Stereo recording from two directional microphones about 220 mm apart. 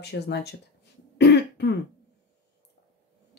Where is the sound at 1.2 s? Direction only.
50° left (ahead or behind).